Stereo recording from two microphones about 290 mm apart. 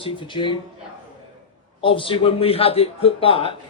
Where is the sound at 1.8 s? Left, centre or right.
Centre.